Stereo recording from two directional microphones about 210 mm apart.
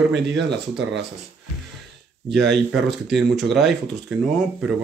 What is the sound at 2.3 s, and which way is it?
Speech, centre (ahead or behind).